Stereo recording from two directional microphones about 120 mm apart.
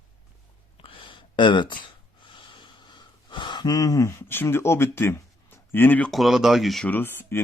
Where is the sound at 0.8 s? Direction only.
45° left (ahead or behind).